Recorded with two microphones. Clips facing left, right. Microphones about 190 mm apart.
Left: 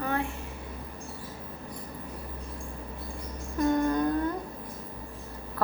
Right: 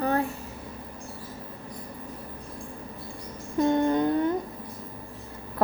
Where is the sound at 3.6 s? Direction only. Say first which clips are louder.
Right 2 dB; 25° right (ahead or behind).